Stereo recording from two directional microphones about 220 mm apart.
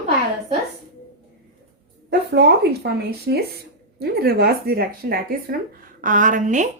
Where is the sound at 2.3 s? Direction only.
45° right (ahead or behind).